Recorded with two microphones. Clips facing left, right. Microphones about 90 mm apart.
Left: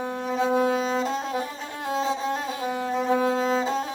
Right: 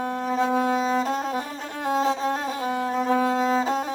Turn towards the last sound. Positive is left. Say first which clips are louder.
# right 2 dB
turn(degrees=-45)  # may be behind; listen again after turning